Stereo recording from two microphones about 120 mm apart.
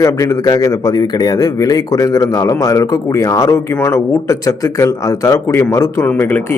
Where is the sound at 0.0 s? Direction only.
25° left (ahead or behind).